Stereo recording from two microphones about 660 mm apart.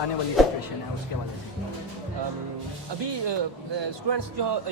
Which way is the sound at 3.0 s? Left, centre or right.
Right.